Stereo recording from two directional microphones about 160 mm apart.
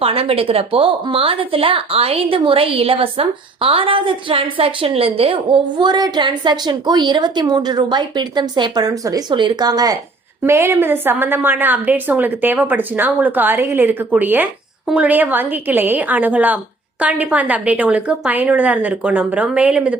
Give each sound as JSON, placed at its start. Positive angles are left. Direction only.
{"t": 0.0, "sound": "a woman's voice", "side_deg": -35}